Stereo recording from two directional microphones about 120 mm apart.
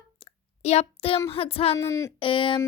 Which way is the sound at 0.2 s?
55° left (ahead or behind).